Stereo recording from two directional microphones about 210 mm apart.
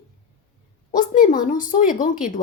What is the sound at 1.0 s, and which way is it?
Speech, 40° left (ahead or behind).